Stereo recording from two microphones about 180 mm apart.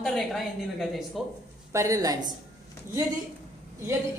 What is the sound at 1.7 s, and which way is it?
Speech, 20° right (ahead or behind).